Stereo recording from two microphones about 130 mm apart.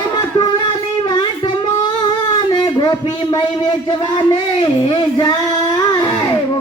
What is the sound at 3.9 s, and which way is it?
Speech, 35° left (ahead or behind).